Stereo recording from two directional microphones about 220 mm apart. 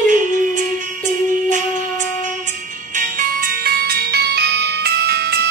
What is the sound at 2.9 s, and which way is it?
Music, 40° right (ahead or behind).